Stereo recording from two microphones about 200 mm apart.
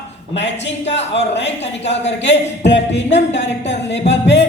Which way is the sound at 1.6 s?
35° left (ahead or behind).